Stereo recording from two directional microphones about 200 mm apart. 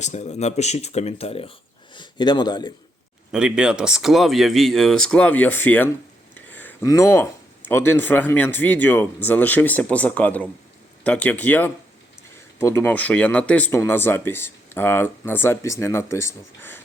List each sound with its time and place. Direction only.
0.0 s speech: 35° left (ahead or behind)
3.3 s speech: 5° right (ahead or behind); by 16.8 s 10° left (ahead or behind)